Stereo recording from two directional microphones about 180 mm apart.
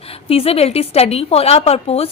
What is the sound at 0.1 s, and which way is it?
Speech, 30° left (ahead or behind).